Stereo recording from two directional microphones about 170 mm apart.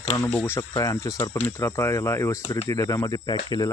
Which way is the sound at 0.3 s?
10° left (ahead or behind).